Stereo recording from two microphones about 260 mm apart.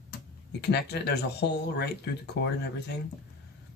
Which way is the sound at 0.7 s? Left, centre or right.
Left.